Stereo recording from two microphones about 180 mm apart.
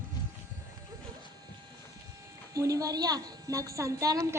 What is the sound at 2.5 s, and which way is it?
A woman's voice, 20° right (ahead or behind).